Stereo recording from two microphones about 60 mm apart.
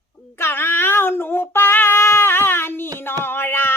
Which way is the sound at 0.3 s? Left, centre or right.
Left.